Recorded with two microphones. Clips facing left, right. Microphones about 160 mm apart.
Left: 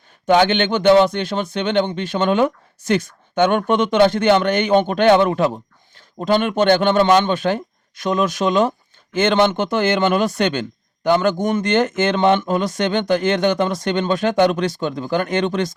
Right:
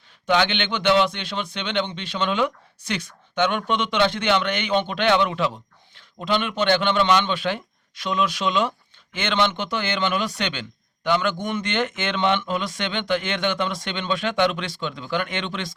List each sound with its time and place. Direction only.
0.3 s speech: 45° left (ahead or behind)